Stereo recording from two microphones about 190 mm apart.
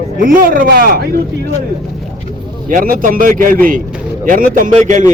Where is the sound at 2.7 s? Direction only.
45° right (ahead or behind).